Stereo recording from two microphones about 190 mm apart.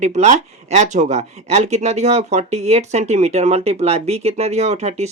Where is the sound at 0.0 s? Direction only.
40° right (ahead or behind).